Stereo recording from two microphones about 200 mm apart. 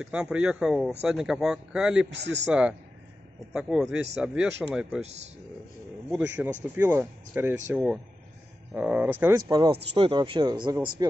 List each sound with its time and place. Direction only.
0.0 s speech: 5° right (ahead or behind)
5.0 s speech: 35° right (ahead or behind)
6.1 s speech: 10° right (ahead or behind)